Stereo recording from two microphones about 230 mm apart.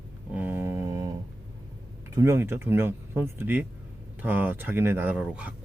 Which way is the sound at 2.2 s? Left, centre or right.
Centre.